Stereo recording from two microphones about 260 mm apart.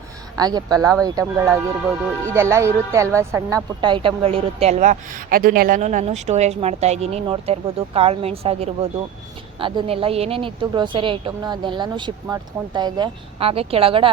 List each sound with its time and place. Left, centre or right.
0.3 s a woman's voice: centre